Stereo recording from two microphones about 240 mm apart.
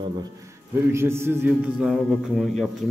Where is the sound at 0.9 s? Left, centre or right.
Centre.